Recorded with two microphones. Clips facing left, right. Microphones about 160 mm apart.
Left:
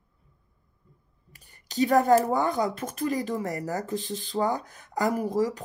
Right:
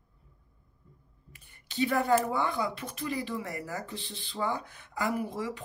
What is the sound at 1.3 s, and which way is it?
Speech, 40° left (ahead or behind).